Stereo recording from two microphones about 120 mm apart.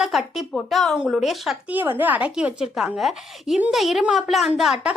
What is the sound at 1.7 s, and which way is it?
A woman's voice, 15° right (ahead or behind).